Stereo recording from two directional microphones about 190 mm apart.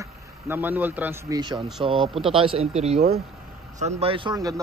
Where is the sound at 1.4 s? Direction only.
25° right (ahead or behind).